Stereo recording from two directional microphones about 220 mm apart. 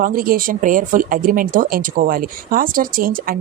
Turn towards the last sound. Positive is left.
turn(degrees=-40)  # may be behind; listen again after turning